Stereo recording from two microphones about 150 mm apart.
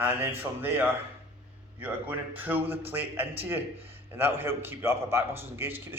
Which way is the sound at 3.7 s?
40° right (ahead or behind).